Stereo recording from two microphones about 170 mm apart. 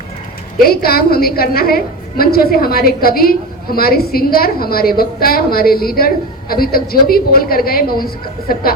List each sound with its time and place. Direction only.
0.6 s a woman's voice: 65° left (ahead or behind)